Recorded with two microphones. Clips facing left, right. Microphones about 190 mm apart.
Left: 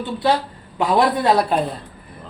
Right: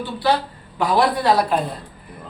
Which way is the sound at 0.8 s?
25° left (ahead or behind).